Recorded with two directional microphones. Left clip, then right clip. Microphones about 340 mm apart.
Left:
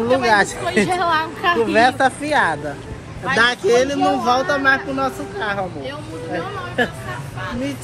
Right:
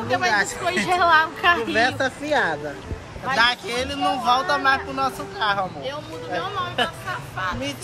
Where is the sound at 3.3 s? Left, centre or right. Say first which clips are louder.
Left 6 dB; centre.